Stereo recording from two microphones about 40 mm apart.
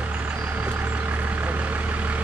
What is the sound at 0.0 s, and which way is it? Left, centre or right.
Vehicle, right.